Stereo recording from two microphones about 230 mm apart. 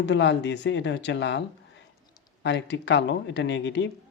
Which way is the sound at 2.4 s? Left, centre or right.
Left.